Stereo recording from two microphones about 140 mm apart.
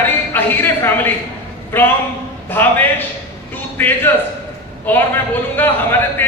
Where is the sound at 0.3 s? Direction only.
15° left (ahead or behind).